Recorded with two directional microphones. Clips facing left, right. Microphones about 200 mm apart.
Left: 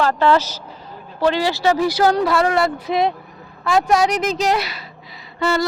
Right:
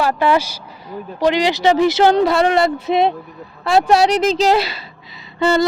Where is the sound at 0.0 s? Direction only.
10° right (ahead or behind).